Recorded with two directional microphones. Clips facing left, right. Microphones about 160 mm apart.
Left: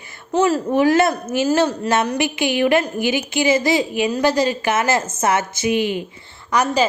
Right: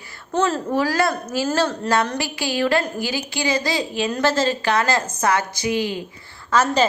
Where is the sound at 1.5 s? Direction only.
10° left (ahead or behind).